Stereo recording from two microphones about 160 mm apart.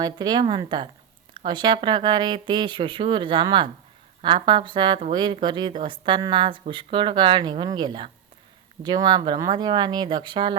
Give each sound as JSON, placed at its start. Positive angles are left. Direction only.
{"t": 0.0, "sound": "speech", "side_deg": -25}